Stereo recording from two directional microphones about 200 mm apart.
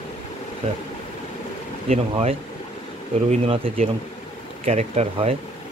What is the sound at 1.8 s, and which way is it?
Speech, 35° right (ahead or behind).